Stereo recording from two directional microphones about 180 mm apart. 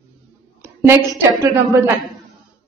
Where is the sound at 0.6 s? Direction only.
15° right (ahead or behind).